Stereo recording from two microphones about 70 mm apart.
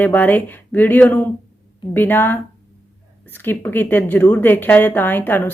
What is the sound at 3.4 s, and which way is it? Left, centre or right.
A woman's voice, left.